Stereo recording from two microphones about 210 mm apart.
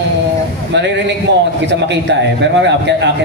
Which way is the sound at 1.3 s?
55° right (ahead or behind).